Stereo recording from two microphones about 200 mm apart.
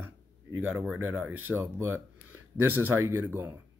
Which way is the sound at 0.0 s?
10° right (ahead or behind).